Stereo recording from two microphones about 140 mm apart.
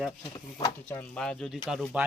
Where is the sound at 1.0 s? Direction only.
10° left (ahead or behind).